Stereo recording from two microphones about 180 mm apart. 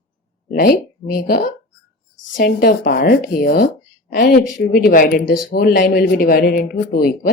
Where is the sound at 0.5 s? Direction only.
50° left (ahead or behind).